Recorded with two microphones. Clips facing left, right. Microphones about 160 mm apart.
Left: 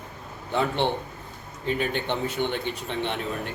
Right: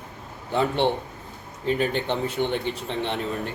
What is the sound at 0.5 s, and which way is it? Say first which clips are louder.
Speech: right 2 dB; centre (ahead or behind).